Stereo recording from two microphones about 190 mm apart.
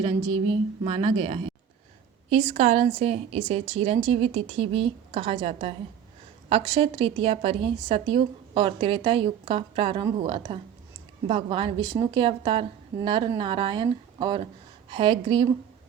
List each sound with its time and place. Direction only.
0.0 s a woman's voice: 25° right (ahead or behind)